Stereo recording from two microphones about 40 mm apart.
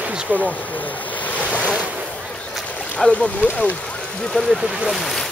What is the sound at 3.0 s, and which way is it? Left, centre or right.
Speech, left.